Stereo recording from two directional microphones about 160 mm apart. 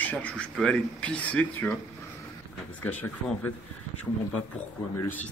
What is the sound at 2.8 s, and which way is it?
Speech, 10° left (ahead or behind).